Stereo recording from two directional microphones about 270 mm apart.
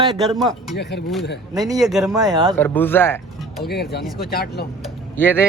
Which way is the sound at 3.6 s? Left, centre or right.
Left.